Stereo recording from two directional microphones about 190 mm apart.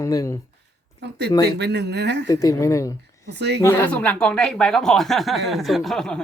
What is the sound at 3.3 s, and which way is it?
Speech, 60° right (ahead or behind).